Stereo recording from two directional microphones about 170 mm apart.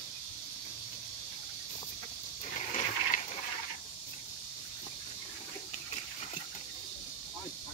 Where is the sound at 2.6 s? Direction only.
40° left (ahead or behind).